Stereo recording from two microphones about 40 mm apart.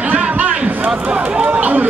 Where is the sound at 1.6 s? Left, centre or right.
Right.